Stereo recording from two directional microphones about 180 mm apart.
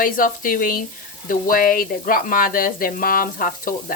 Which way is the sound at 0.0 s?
50° left (ahead or behind).